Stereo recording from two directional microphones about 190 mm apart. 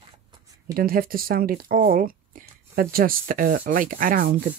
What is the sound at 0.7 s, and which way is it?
Speech, 50° right (ahead or behind).